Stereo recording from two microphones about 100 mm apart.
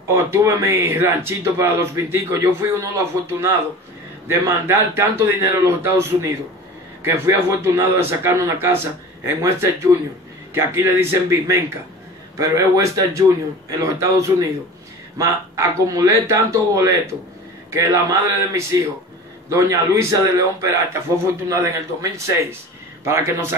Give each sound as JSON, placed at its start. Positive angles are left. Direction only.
{"t": 0.1, "sound": "a man's voice", "side_deg": -30}